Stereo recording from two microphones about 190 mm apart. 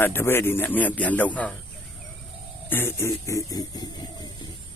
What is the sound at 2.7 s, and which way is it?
Speech, 10° left (ahead or behind).